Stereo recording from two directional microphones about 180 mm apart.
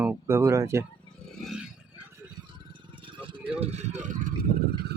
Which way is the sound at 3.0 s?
30° right (ahead or behind).